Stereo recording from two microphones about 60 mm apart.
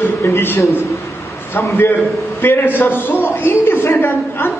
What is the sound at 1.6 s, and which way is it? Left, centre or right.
Speech, left.